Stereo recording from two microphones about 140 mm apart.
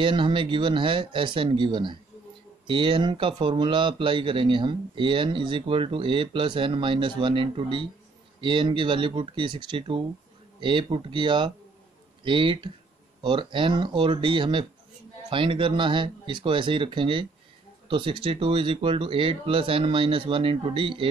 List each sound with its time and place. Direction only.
0.0 s speech: 35° right (ahead or behind)